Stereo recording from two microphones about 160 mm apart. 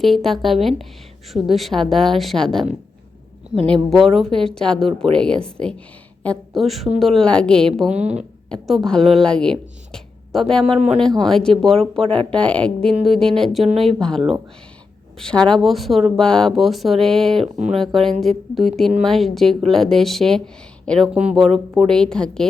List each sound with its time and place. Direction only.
0.0 s speech: centre (ahead or behind)
3.9 s speech: centre (ahead or behind)
7.9 s speech: 45° right (ahead or behind)
8.6 s speech: centre (ahead or behind)
10.7 s speech: 40° right (ahead or behind)
11.2 s speech: 5° left (ahead or behind)
15.2 s speech: 5° left (ahead or behind)